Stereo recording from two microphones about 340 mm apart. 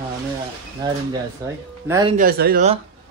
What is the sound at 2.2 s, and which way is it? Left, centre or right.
Speech, right.